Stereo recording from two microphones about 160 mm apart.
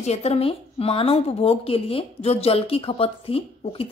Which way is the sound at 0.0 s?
40° left (ahead or behind).